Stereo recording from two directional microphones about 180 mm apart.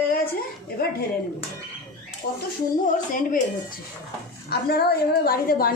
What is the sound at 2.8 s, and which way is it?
A woman's voice, 50° left (ahead or behind).